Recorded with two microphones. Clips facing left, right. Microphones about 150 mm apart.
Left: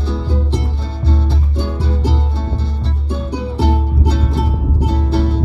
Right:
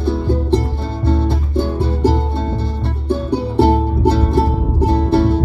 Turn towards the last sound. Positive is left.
turn(degrees=-55)  # may be behind; listen again after turning